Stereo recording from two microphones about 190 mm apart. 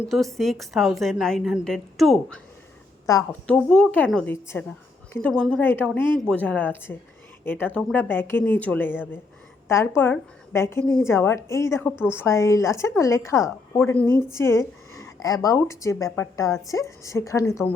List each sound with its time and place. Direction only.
0.1 s a woman's voice: centre (ahead or behind)
3.1 s a woman's voice: 20° left (ahead or behind)
3.4 s a woman's voice: 5° left (ahead or behind)